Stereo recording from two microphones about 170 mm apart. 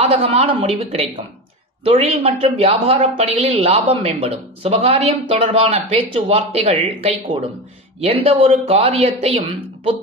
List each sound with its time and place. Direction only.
0.0 s speech: 35° right (ahead or behind)